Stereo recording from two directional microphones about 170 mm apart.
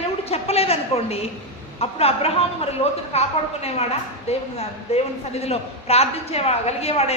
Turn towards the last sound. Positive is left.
turn(degrees=40)  # may be behind; listen again after turning